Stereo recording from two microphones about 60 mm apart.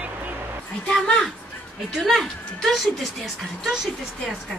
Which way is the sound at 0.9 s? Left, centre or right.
Centre.